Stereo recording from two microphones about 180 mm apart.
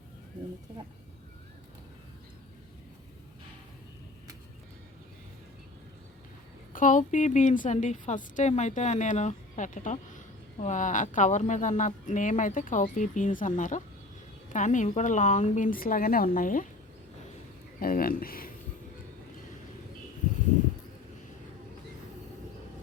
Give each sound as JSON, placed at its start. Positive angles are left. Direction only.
{"t": 6.7, "sound": "a woman's voice", "side_deg": 45}
{"t": 17.7, "sound": "speech", "side_deg": 50}